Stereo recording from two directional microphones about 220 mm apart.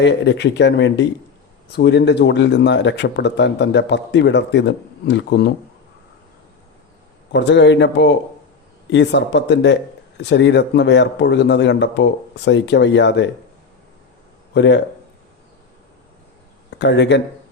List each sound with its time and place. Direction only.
0.0 s a man's voice: 55° left (ahead or behind)
7.3 s a man's voice: 55° left (ahead or behind)
14.5 s speech: 55° left (ahead or behind)
16.7 s speech: 50° left (ahead or behind)